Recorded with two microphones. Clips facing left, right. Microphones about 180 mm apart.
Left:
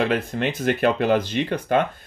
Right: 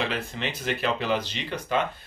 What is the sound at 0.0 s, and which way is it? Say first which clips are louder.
Speech: left 7 dB; 50° left (ahead or behind).